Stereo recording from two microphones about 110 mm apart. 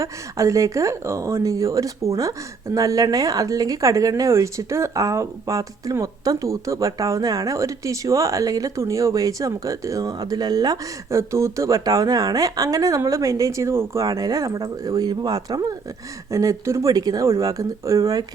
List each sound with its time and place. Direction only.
0.0 s speech: 30° right (ahead or behind)
11.2 s speech: 25° right (ahead or behind)